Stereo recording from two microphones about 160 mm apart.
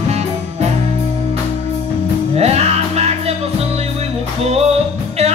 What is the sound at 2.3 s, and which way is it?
Music, 40° right (ahead or behind).